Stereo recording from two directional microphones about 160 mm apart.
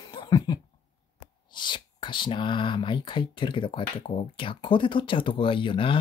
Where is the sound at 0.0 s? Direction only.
25° left (ahead or behind).